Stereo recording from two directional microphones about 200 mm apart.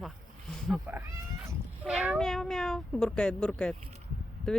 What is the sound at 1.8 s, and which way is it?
Speech, 5° right (ahead or behind).